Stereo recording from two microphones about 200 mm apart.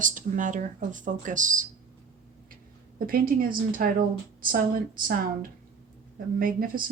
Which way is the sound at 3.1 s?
45° right (ahead or behind).